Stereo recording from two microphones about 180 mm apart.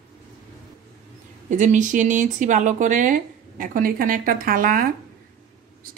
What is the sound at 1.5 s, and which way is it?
Speech, 45° right (ahead or behind).